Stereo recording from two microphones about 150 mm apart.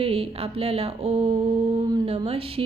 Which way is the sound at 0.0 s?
40° right (ahead or behind).